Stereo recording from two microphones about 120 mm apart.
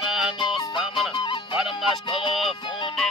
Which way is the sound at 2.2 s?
45° left (ahead or behind).